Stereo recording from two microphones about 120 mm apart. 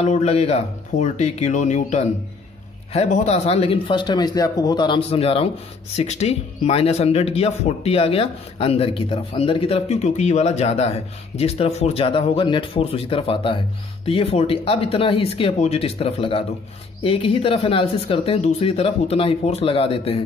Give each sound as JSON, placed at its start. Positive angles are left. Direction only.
{"t": 0.0, "sound": "speech", "side_deg": 65}
{"t": 2.9, "sound": "speech", "side_deg": 60}